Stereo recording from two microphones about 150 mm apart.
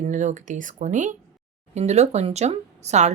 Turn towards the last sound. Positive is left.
turn(degrees=-50)  # may be behind; listen again after turning